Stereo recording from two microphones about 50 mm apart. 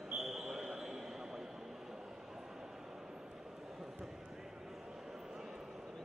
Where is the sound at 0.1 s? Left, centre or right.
Centre.